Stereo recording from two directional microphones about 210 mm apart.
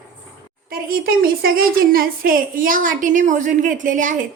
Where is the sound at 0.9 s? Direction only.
45° right (ahead or behind).